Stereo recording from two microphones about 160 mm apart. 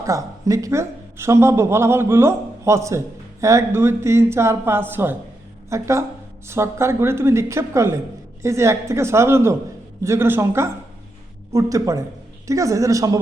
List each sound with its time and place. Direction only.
0.0 s a woman's voice: 20° right (ahead or behind)